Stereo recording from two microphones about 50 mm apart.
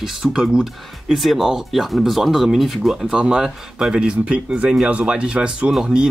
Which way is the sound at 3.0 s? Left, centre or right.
Centre.